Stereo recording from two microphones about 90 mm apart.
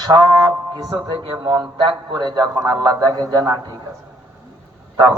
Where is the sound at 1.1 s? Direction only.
55° right (ahead or behind).